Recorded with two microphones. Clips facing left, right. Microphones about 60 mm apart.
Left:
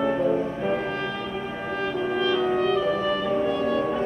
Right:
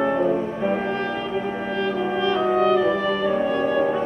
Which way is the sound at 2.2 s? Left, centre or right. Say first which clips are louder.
Right 4 dB; right.